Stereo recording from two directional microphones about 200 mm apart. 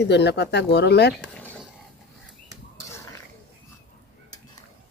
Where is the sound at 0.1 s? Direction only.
55° left (ahead or behind).